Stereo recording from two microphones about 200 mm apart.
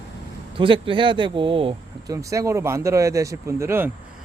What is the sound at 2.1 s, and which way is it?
A man's voice, 15° right (ahead or behind).